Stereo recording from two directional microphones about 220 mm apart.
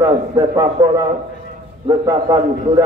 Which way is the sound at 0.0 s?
15° right (ahead or behind).